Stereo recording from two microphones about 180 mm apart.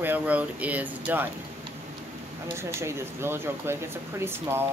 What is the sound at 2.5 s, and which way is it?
Speech, 15° right (ahead or behind).